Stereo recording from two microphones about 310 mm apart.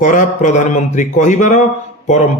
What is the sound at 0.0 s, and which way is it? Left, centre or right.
A man's voice, left.